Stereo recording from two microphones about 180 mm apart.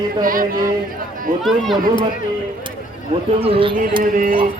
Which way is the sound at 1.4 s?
Centre (ahead or behind).